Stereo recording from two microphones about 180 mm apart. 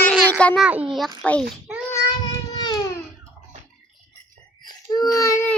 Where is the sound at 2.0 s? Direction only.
25° left (ahead or behind).